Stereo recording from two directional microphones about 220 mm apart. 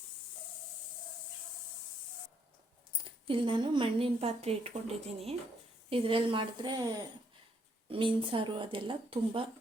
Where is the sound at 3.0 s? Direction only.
25° right (ahead or behind).